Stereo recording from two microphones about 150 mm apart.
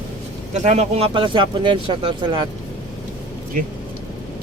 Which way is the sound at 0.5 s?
50° right (ahead or behind).